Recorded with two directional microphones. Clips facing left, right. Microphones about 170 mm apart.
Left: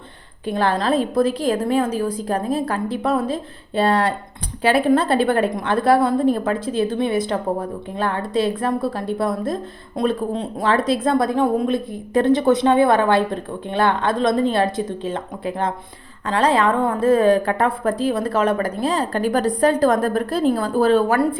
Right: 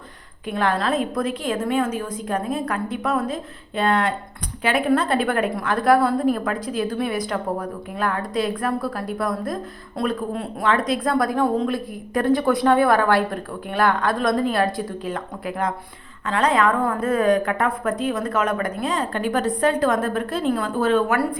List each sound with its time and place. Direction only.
0.4 s a woman's voice: 30° left (ahead or behind)